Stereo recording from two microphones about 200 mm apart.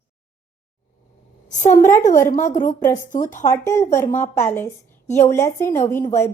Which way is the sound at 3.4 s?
15° left (ahead or behind).